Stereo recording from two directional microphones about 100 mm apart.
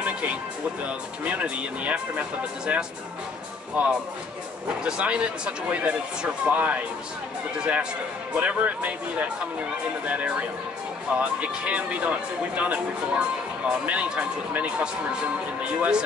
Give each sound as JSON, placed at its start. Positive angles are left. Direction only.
{"t": 0.0, "sound": "music", "side_deg": -15}
{"t": 0.8, "sound": "speech", "side_deg": -15}